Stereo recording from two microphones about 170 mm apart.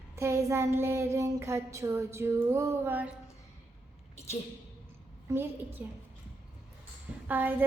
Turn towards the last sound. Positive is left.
turn(degrees=-10)  # may be behind; listen again after turning